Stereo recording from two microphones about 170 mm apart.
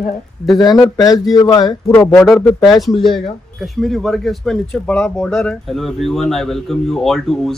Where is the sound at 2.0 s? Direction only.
5° left (ahead or behind).